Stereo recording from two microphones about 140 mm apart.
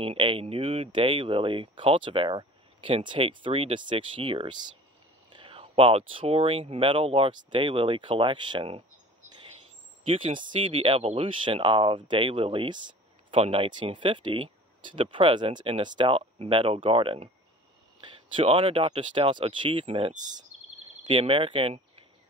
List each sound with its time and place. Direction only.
0.0 s speech: 40° right (ahead or behind)
10.0 s speech: 35° right (ahead or behind)
18.3 s speech: 40° right (ahead or behind)